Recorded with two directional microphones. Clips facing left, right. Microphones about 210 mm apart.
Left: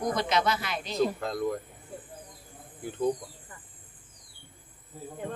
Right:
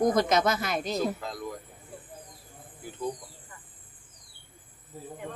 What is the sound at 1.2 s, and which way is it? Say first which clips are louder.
Speech: left 5 dB; 55° left (ahead or behind).